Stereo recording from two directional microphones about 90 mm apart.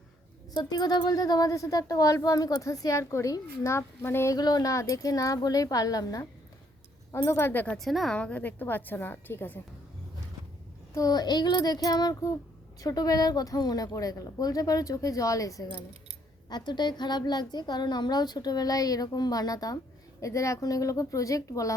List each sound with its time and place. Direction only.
0.5 s speech: 50° left (ahead or behind); by 4.4 s 25° left (ahead or behind)
4.4 s speech: 45° left (ahead or behind)
7.3 s a woman's voice: 25° left (ahead or behind)
7.8 s a woman's voice: centre (ahead or behind)
8.1 s a woman's voice: 15° left (ahead or behind)
10.9 s a woman's voice: 45° left (ahead or behind)
16.5 s a woman's voice: 55° left (ahead or behind); by 21.8 s 40° left (ahead or behind)